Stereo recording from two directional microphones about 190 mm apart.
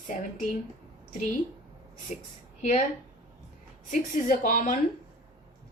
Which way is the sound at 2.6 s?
40° left (ahead or behind).